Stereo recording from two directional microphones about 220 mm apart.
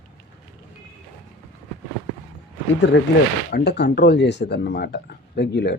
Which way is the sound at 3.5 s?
50° left (ahead or behind).